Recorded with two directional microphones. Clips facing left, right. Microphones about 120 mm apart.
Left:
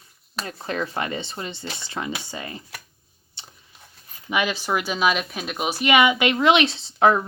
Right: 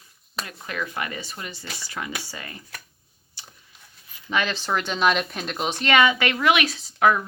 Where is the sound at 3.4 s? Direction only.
25° left (ahead or behind).